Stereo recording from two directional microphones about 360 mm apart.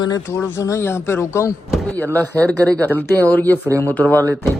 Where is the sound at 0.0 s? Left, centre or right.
Centre.